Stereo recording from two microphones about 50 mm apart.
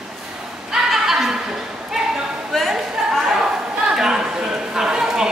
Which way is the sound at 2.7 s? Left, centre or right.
Centre.